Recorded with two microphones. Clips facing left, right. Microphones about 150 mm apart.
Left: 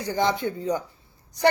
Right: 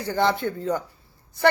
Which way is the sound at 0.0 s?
15° left (ahead or behind).